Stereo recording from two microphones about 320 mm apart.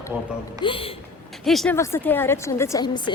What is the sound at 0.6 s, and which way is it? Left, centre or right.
Speech, centre.